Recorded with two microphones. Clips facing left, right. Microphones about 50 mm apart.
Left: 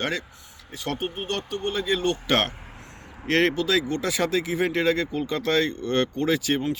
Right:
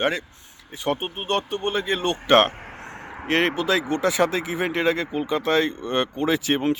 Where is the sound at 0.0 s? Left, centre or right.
Right.